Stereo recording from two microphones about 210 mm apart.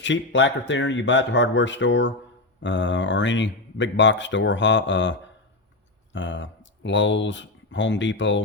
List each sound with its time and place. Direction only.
0.0 s speech: 60° left (ahead or behind)
6.1 s speech: 60° left (ahead or behind)